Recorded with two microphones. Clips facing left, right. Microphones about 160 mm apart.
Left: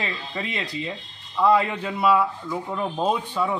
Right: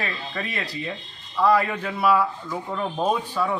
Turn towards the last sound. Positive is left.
turn(degrees=10)  # may be behind; listen again after turning